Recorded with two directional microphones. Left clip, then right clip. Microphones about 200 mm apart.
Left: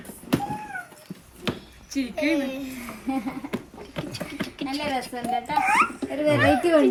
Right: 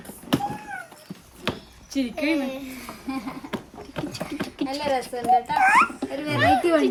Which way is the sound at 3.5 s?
10° right (ahead or behind).